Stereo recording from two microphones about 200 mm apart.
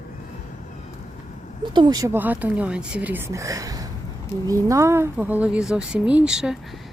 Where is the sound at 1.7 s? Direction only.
20° right (ahead or behind); by 6.5 s 5° right (ahead or behind).